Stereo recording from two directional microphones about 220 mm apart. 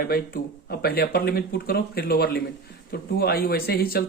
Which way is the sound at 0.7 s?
45° left (ahead or behind).